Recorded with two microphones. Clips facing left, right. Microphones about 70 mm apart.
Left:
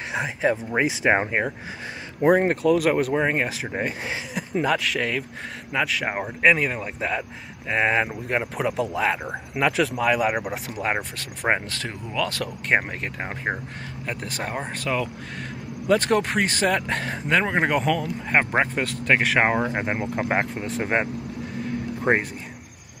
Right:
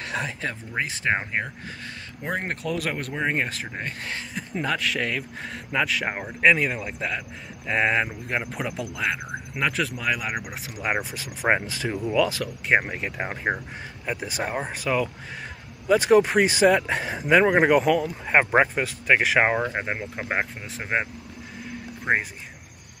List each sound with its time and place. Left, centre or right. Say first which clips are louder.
0.1 s speech: left 7 dB; centre
2.2 s speech: left 11 dB; centre